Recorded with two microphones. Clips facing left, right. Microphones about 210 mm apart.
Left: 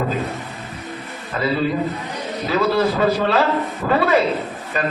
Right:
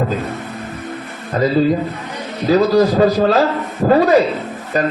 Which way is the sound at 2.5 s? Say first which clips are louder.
Right 6 dB; 40° right (ahead or behind).